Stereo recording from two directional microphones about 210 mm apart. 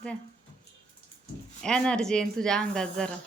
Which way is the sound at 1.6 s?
5° left (ahead or behind).